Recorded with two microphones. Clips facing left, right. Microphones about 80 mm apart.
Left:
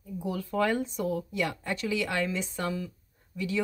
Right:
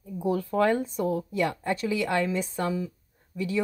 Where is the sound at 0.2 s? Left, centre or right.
Right.